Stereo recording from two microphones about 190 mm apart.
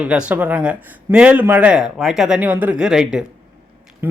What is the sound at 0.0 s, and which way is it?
Speech, 5° right (ahead or behind).